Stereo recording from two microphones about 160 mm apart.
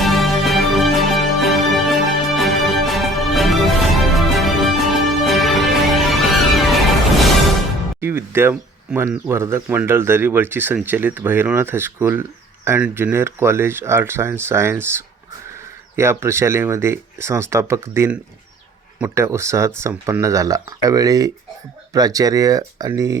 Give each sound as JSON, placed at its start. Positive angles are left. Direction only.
{"t": 0.0, "sound": "music", "side_deg": 0}
{"t": 8.0, "sound": "speech", "side_deg": -15}